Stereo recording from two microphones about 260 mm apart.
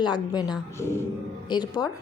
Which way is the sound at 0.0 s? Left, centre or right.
Centre.